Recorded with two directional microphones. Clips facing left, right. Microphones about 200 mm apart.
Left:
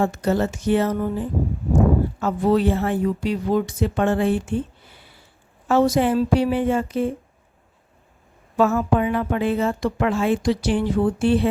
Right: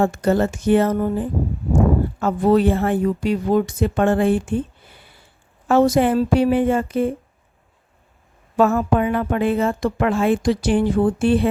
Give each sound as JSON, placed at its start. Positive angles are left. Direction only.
{"t": 0.0, "sound": "a woman's voice", "side_deg": -50}
{"t": 2.2, "sound": "a woman's voice", "side_deg": -50}
{"t": 5.6, "sound": "a woman's voice", "side_deg": -50}
{"t": 8.5, "sound": "a woman's voice", "side_deg": -50}